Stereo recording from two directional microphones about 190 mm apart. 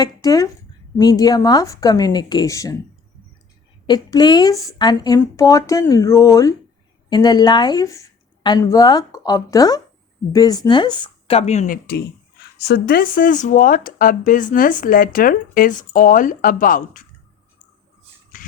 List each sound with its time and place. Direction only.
0.0 s speech: 20° left (ahead or behind)
3.8 s a woman's voice: 20° left (ahead or behind); by 12.0 s 50° left (ahead or behind)
12.5 s speech: 60° left (ahead or behind); by 17.1 s 45° left (ahead or behind)
18.3 s a sound: 45° left (ahead or behind)